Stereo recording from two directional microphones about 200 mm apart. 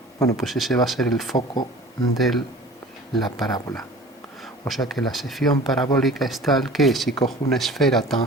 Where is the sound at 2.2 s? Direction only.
Centre (ahead or behind).